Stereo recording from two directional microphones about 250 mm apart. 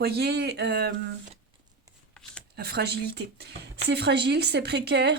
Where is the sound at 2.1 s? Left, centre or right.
Centre.